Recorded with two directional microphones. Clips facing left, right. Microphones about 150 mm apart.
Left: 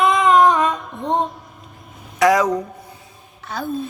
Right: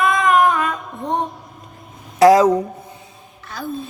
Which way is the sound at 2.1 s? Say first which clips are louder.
Right 5 dB; 30° right (ahead or behind).